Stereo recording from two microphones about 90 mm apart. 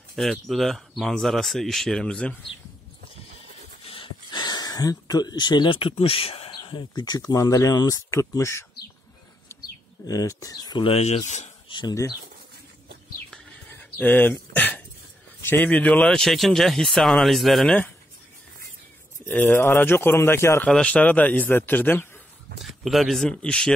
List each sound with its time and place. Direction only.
0.1 s speech: centre (ahead or behind)
3.8 s a sound: 75° left (ahead or behind); by 6.5 s 90° left
6.5 s speech: 55° left (ahead or behind); by 8.6 s 30° left (ahead or behind)
9.5 s bird: 30° left (ahead or behind)
10.0 s speech: 40° left (ahead or behind)
11.9 s speech: 35° left (ahead or behind)
13.9 s speech: 20° left (ahead or behind); by 17.7 s centre (ahead or behind)
19.2 s a man's voice: 20° left (ahead or behind)
20.6 s speech: 10° left (ahead or behind)
22.6 s speech: centre (ahead or behind)
23.2 s speech: 10° left (ahead or behind)